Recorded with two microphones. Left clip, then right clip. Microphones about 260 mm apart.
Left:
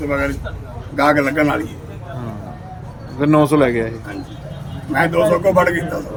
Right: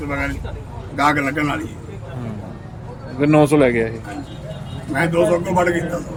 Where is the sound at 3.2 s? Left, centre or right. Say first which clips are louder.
Even; centre.